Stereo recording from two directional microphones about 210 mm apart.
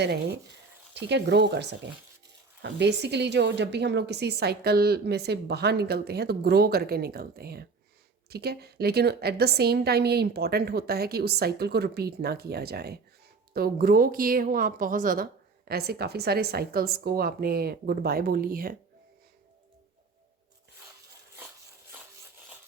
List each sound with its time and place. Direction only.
0.0 s a woman's voice: 50° right (ahead or behind)